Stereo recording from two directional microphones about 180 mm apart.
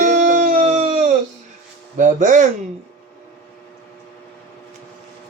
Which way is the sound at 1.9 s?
45° right (ahead or behind).